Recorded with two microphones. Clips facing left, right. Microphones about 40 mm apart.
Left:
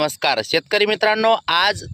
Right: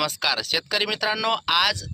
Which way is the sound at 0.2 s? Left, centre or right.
Left.